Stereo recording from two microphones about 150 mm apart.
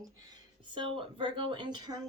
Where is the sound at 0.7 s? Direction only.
35° right (ahead or behind).